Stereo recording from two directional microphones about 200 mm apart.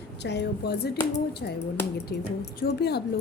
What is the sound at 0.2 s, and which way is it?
Speech, 55° left (ahead or behind).